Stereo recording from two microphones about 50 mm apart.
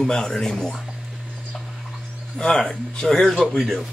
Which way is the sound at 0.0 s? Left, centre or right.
Centre.